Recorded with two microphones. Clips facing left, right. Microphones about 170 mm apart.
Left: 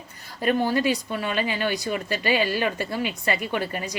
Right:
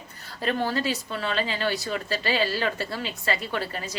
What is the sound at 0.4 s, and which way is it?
Speech, 15° left (ahead or behind).